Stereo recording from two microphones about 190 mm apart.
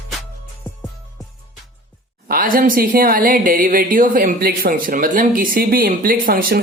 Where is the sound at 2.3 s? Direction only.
50° right (ahead or behind).